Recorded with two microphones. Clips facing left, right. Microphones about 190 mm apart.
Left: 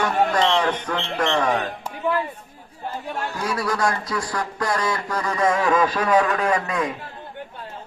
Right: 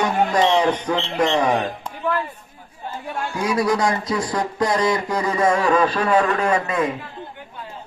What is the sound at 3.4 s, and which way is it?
A man's voice, 15° right (ahead or behind).